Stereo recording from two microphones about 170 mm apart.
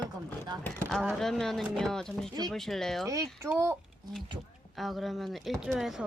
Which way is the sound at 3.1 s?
20° right (ahead or behind).